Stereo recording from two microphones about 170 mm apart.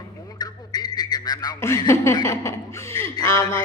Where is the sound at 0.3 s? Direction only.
25° left (ahead or behind).